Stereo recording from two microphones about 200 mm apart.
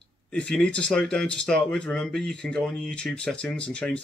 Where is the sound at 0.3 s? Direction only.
5° left (ahead or behind).